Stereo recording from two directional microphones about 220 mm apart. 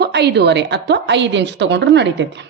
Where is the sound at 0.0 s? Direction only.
50° right (ahead or behind).